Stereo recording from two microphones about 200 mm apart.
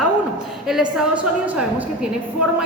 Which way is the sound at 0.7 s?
5° right (ahead or behind).